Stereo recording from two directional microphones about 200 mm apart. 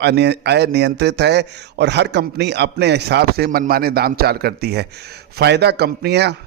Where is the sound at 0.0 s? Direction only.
55° right (ahead or behind).